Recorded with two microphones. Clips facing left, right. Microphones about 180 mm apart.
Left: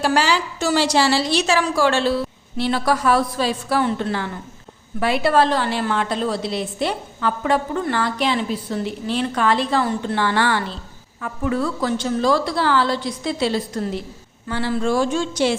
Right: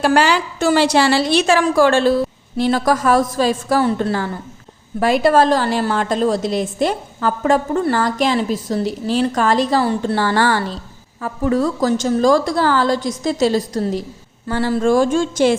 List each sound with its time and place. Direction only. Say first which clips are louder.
0.0 s a woman's voice: right 4 dB; 55° right (ahead or behind)